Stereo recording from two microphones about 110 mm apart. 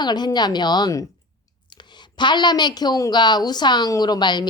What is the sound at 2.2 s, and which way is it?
A woman's voice, 45° left (ahead or behind).